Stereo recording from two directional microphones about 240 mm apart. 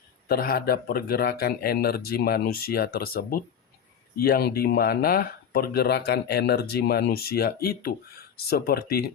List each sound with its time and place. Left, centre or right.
0.3 s speech: left